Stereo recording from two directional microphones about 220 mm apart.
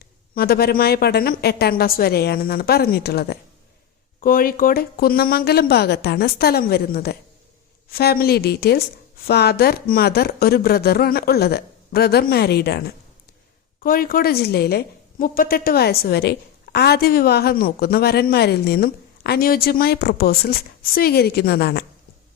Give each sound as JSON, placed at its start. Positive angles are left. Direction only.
{"t": 0.3, "sound": "a woman's voice", "side_deg": 45}
{"t": 13.8, "sound": "a woman's voice", "side_deg": 40}